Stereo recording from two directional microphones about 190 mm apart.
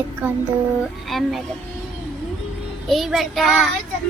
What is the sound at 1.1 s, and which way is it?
Speech, centre (ahead or behind).